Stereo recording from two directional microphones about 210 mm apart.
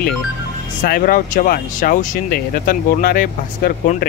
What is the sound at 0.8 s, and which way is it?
Speech, 45° left (ahead or behind).